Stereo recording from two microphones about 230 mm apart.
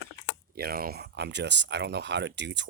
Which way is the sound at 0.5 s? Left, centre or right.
Right.